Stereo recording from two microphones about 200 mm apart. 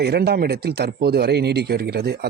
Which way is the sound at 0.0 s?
55° right (ahead or behind).